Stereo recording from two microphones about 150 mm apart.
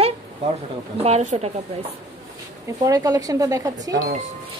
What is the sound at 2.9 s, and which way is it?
Speech, 25° right (ahead or behind).